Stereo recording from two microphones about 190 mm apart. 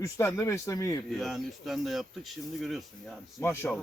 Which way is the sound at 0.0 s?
15° left (ahead or behind).